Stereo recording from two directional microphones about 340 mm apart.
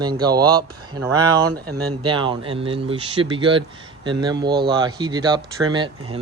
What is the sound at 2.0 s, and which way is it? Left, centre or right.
Speech, centre.